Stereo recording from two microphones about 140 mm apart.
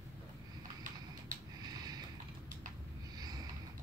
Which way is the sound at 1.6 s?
30° right (ahead or behind).